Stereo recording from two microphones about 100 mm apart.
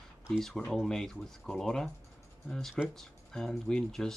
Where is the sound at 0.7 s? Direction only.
5° left (ahead or behind).